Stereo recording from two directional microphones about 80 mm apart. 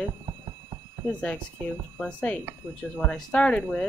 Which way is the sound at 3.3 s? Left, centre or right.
Centre.